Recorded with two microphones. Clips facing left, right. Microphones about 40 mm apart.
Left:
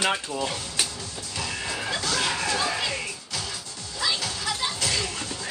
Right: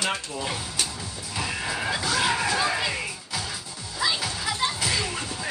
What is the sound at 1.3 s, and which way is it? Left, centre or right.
Music, centre.